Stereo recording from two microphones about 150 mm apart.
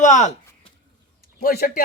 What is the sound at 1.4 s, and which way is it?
Speech, 75° left (ahead or behind).